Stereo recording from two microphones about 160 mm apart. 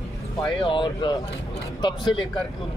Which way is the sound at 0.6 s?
30° left (ahead or behind).